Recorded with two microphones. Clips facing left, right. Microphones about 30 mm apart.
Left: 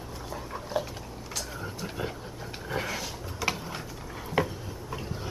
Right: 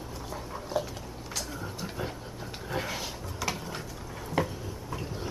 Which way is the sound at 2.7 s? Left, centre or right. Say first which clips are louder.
Left 1 dB; centre.